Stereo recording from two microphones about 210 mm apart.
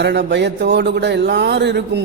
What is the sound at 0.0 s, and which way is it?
A man's voice, 55° right (ahead or behind).